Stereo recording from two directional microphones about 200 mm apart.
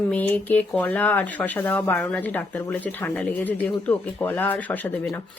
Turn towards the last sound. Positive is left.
turn(degrees=10)  # may be behind; listen again after turning